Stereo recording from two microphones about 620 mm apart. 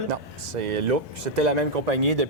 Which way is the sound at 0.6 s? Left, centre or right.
Right.